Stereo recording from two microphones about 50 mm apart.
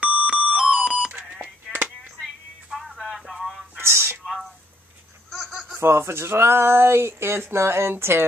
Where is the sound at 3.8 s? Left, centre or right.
Right.